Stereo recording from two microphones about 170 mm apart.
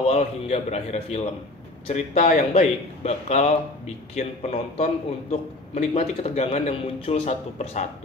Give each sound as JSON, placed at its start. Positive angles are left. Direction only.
{"t": 0.0, "sound": "speech", "side_deg": 40}